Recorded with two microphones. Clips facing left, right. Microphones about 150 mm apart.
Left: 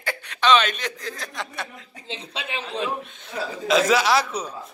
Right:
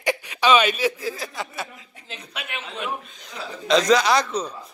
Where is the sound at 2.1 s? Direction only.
30° left (ahead or behind).